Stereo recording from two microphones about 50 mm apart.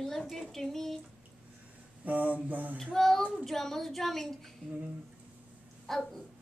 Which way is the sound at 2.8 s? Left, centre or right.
Centre.